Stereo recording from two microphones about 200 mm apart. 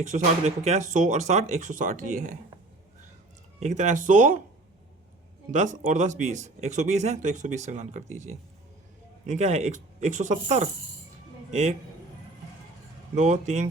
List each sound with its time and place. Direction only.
0.0 s speech: 35° right (ahead or behind)
3.6 s speech: 35° right (ahead or behind)
5.5 s speech: 35° right (ahead or behind)
13.1 s speech: 35° right (ahead or behind)